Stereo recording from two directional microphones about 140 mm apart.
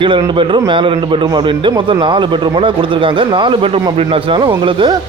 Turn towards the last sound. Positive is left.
turn(degrees=-35)  # may be behind; listen again after turning